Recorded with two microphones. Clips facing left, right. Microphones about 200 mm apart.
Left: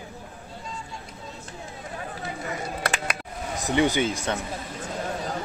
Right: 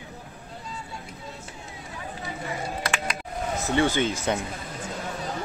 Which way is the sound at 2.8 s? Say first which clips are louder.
Left 3 dB; 60° left (ahead or behind).